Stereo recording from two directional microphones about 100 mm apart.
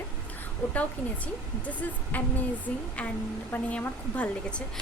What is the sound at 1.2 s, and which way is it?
A woman's voice, 15° left (ahead or behind).